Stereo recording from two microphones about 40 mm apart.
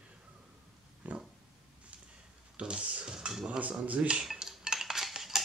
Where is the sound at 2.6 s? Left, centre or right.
Right.